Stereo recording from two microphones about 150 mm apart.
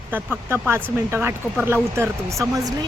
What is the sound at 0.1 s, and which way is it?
Speech, 10° right (ahead or behind).